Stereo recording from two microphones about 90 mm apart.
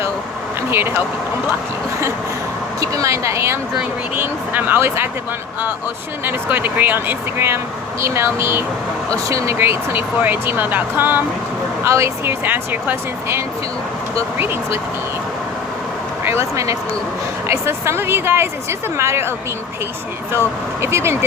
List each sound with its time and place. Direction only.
0.7 s speech: 25° right (ahead or behind)
2.8 s speech: 35° right (ahead or behind)
4.1 s speech: 20° right (ahead or behind)
6.2 s speech: 20° right (ahead or behind); by 9.6 s 35° right (ahead or behind)
9.6 s speech: 20° right (ahead or behind)
11.8 s speech: 30° right (ahead or behind)
16.2 s speech: 30° right (ahead or behind)
20.8 s speech: 30° right (ahead or behind)